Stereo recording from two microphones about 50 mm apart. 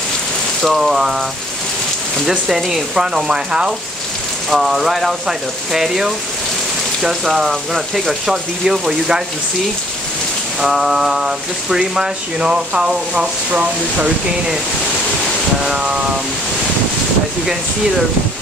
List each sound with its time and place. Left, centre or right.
0.6 s speech: centre
2.2 s speech: centre
4.5 s speech: centre
10.6 s speech: centre; by 14.1 s right
15.6 s speech: centre